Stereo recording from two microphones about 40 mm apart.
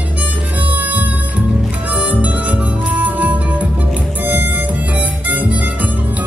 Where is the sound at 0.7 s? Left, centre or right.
Right.